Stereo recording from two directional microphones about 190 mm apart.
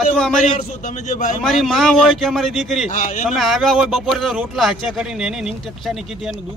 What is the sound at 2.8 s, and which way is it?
Speech, 40° left (ahead or behind).